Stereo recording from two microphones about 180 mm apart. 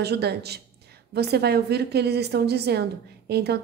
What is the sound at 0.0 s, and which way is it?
A woman's voice, 65° right (ahead or behind).